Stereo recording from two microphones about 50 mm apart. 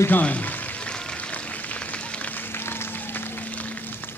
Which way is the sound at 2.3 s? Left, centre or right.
Left.